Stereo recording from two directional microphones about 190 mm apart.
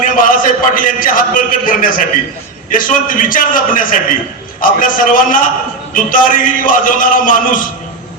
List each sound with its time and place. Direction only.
0.0 s a man's voice: 45° left (ahead or behind)